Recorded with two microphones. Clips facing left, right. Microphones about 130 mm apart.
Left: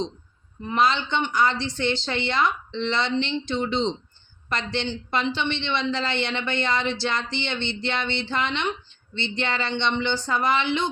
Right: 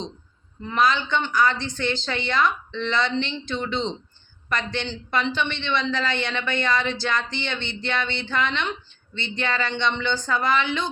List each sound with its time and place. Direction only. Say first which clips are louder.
0.6 s speech: even; 20° left (ahead or behind)